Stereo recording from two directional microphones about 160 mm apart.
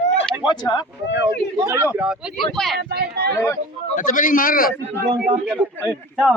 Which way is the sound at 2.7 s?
85° right.